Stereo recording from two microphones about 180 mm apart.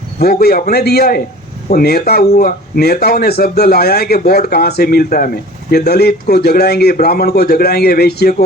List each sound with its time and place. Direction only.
0.2 s speech: 60° left (ahead or behind)